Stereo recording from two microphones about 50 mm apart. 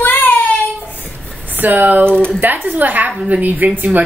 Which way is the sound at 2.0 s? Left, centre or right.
Right.